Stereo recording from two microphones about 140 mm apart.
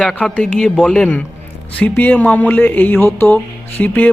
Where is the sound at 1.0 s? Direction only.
10° left (ahead or behind).